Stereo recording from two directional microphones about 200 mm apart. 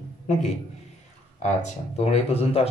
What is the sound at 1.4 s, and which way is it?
Speech, 35° left (ahead or behind).